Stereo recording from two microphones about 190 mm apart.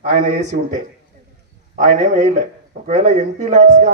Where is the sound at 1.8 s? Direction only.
40° right (ahead or behind).